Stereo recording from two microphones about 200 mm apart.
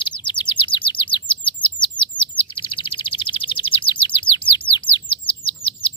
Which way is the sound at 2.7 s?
25° left (ahead or behind).